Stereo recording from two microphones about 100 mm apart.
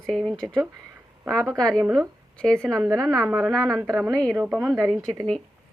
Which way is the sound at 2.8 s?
30° right (ahead or behind).